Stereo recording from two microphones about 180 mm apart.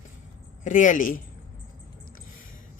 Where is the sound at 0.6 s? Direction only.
45° left (ahead or behind).